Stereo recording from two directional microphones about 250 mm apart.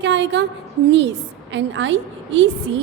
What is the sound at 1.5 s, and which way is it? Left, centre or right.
Speech, right.